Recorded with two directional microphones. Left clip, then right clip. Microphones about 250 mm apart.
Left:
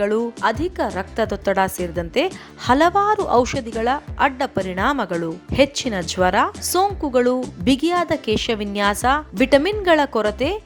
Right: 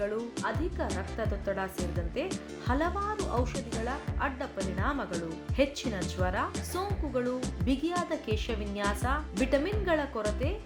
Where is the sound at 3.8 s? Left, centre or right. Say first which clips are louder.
Left 16 dB; left.